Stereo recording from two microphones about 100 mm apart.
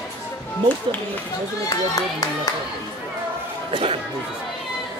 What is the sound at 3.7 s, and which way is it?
Chatter, 65° right (ahead or behind).